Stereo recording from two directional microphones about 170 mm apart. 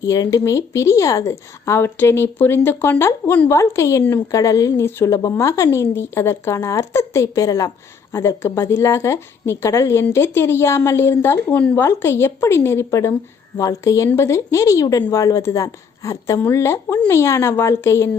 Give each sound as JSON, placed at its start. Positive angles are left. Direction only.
{"t": 0.0, "sound": "a woman's voice", "side_deg": 20}